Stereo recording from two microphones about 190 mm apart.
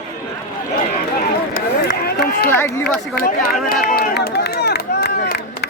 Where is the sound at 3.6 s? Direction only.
50° left (ahead or behind).